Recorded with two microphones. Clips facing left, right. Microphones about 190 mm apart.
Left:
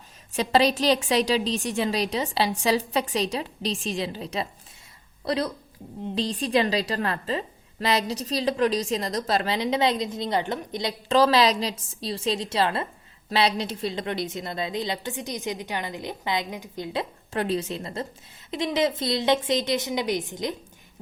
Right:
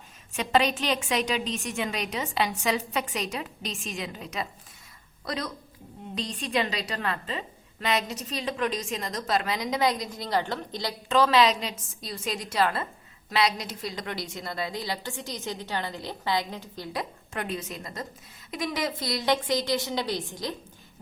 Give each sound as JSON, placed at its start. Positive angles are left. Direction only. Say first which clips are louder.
{"t": 0.3, "sound": "a woman's voice", "louder": "left 3 dB", "side_deg": 35}
{"t": 11.1, "sound": "a woman's voice", "louder": "left 2 dB", "side_deg": 35}